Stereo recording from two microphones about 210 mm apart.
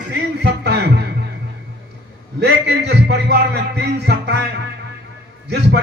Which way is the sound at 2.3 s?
55° right (ahead or behind).